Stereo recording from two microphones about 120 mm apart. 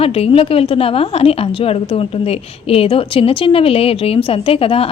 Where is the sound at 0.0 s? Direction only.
55° left (ahead or behind).